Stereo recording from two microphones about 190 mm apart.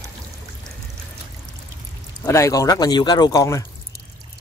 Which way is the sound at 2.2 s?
15° left (ahead or behind).